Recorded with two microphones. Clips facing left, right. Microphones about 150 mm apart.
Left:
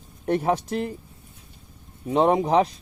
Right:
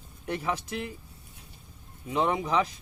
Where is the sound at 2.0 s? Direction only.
40° left (ahead or behind).